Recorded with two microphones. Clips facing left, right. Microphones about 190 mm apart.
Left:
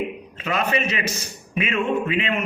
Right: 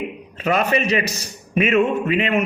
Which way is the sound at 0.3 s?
40° right (ahead or behind).